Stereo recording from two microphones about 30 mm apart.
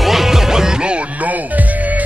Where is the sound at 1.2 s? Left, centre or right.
Right.